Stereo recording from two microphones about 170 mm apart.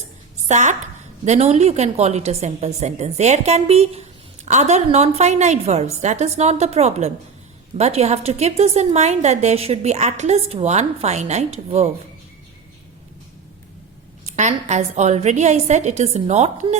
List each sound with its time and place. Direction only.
0.4 s a woman's voice: 45° right (ahead or behind)
14.3 s a woman's voice: 45° right (ahead or behind)